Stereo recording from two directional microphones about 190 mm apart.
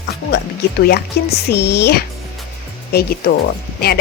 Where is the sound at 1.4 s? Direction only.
60° left (ahead or behind).